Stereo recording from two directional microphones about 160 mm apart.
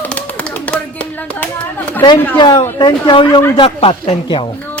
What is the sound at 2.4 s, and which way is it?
Speech, 30° left (ahead or behind).